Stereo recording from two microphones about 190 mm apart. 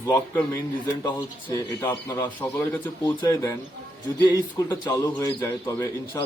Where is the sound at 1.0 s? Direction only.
15° left (ahead or behind).